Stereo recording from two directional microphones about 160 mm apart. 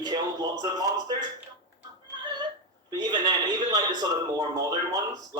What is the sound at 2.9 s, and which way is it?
A man's voice, 25° right (ahead or behind).